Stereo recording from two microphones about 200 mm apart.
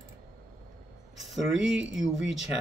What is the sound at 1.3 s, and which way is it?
Speech, centre (ahead or behind).